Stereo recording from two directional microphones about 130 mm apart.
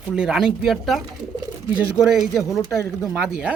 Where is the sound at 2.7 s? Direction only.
25° left (ahead or behind).